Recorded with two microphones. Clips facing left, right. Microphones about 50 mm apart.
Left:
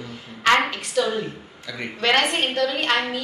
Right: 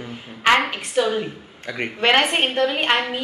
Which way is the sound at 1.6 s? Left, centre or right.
Right.